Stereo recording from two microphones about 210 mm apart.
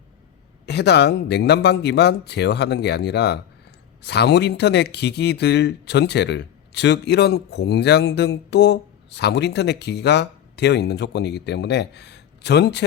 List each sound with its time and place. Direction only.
0.6 s speech: 55° left (ahead or behind)